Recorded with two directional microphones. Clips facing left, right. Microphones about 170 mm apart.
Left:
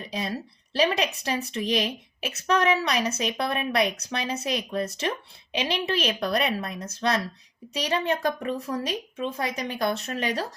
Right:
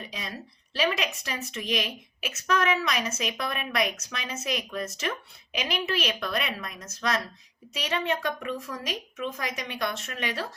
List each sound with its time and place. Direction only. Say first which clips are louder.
0.1 s a woman's voice: left 7 dB; 35° left (ahead or behind)